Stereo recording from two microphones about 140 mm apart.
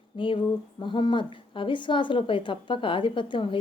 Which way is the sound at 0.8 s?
35° left (ahead or behind).